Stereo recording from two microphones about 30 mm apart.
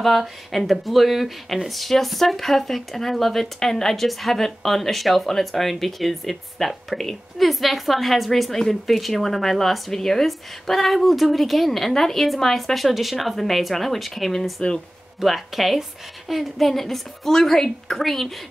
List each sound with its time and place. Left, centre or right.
0.0 s a woman's voice: centre
7.4 s a woman's voice: centre